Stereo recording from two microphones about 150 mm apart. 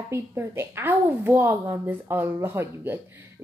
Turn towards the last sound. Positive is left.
turn(degrees=-15)  # may be behind; listen again after turning